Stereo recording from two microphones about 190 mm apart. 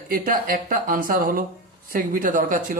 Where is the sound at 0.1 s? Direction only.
50° right (ahead or behind).